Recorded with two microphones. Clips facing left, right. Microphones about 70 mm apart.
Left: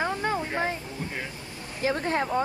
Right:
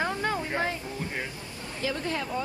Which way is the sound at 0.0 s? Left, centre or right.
Left.